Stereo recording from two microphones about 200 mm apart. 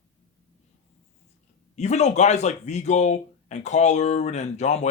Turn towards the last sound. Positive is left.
turn(degrees=35)  # may be behind; listen again after turning